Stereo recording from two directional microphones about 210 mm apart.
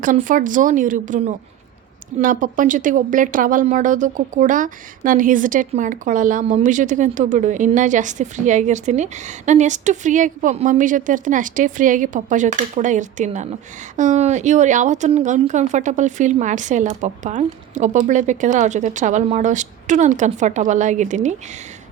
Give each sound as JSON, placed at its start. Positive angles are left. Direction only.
{"t": 0.0, "sound": "speech", "side_deg": -40}